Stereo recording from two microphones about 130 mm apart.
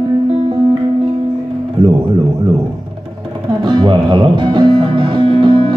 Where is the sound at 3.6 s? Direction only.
35° right (ahead or behind).